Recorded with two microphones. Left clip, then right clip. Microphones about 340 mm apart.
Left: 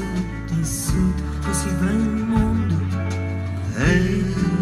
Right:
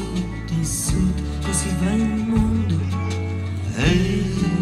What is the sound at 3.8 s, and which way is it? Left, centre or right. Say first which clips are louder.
Music: left 1 dB; centre.